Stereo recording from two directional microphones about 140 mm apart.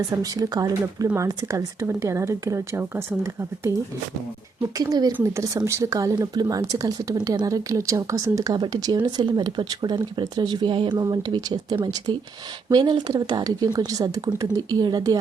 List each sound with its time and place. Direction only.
0.0 s speech: 25° right (ahead or behind)
4.8 s speech: 25° right (ahead or behind)
11.0 s speech: 25° right (ahead or behind)